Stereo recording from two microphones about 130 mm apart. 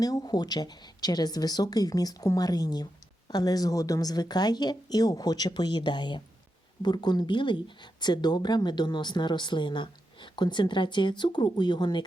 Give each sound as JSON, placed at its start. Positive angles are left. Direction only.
{"t": 0.0, "sound": "speech", "side_deg": 30}